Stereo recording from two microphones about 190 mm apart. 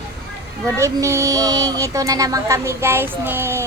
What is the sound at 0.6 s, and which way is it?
Speech, 15° right (ahead or behind).